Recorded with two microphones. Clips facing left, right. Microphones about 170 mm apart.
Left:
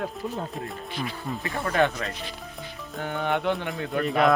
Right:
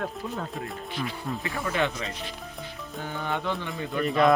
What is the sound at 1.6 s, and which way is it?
Speech, 45° left (ahead or behind).